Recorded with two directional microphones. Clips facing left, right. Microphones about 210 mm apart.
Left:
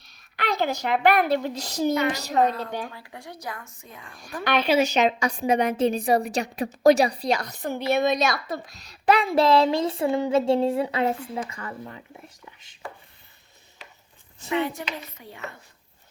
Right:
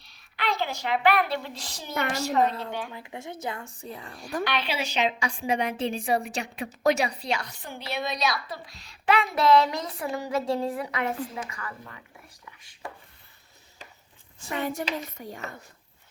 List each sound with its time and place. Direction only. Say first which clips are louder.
0.0 s a woman's voice: left 1 dB; 45° left (ahead or behind)
2.9 s a woman's voice: right 3 dB; 20° right (ahead or behind); by 4.4 s 40° right (ahead or behind)
4.4 s a woman's voice: left 12 dB; 45° left (ahead or behind); by 12.8 s 25° left (ahead or behind)
14.5 s a child's voice: left 3 dB; 45° right (ahead or behind)